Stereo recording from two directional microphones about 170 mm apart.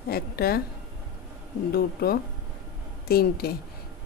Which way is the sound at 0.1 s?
65° left (ahead or behind).